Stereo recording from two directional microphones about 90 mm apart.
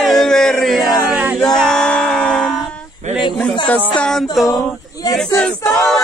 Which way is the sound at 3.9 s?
10° left (ahead or behind).